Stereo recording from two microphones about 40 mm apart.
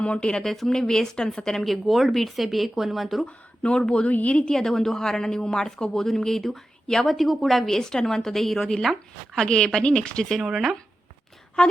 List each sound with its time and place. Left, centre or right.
0.0 s speech: left
0.4 s speech: centre
1.6 s speech: centre
3.2 s speech: left
4.1 s a woman's voice: left
4.5 s speech: centre
7.1 s speech: centre
7.8 s speech: centre
9.3 s speech: centre
10.4 s speech: centre
11.6 s speech: left